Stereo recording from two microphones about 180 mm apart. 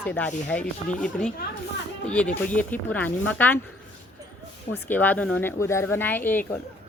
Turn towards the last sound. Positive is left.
turn(degrees=10)  # may be behind; listen again after turning